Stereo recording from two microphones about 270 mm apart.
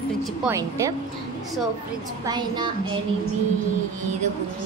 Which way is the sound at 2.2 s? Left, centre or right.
Centre.